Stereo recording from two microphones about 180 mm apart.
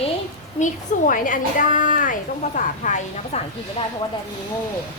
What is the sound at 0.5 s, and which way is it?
A woman's voice, 45° left (ahead or behind).